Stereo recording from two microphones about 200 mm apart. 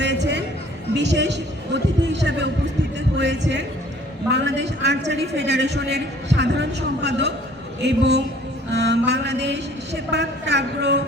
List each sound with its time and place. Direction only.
0.0 s a sound: 60° right (ahead or behind)
3.2 s music: 60° right (ahead or behind)
4.3 s a man's voice: 60° right (ahead or behind)